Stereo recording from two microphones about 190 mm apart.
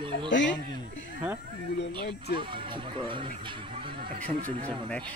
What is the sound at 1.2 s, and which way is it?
Speech, 5° right (ahead or behind).